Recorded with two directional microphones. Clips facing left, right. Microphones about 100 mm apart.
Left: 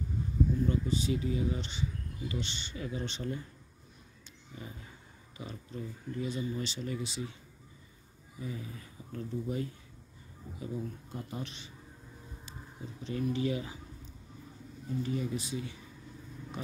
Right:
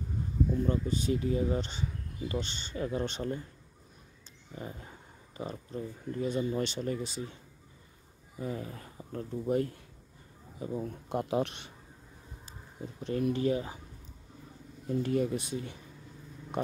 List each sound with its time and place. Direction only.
0.7 s speech: 50° right (ahead or behind)
4.6 s speech: 45° right (ahead or behind)
8.4 s speech: 50° right (ahead or behind)
10.6 s speech: 40° right (ahead or behind)
11.1 s speech: 85° right; by 11.7 s 60° right (ahead or behind)
13.0 s speech: 50° right (ahead or behind)
14.9 s speech: 60° right (ahead or behind)